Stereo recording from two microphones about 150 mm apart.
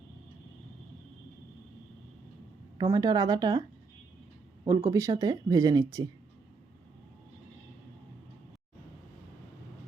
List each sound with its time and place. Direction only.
2.7 s speech: 25° right (ahead or behind)
4.6 s speech: 25° right (ahead or behind)